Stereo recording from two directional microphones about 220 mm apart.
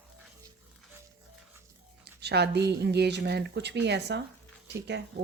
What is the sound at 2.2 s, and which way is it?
A woman's voice, 50° right (ahead or behind).